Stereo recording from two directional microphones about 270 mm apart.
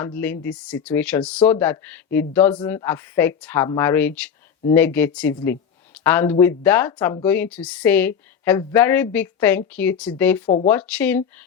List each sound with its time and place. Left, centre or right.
0.0 s a woman's voice: centre
10.4 s speech: centre
10.7 s speech: centre